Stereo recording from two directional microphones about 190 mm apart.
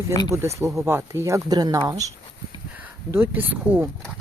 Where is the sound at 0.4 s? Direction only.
15° right (ahead or behind).